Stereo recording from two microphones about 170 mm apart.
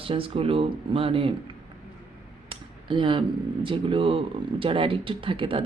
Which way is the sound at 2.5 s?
30° right (ahead or behind).